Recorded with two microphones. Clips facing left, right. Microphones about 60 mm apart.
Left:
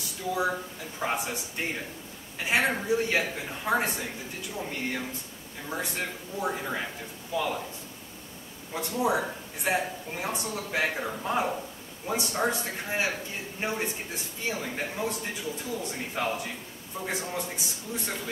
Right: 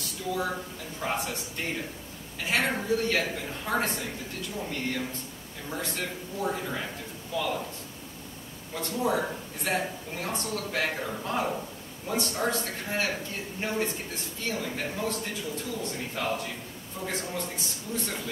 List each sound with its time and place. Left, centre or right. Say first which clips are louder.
0.3 s a man's voice: left 2 dB; centre
8.7 s a man's voice: left 1 dB; centre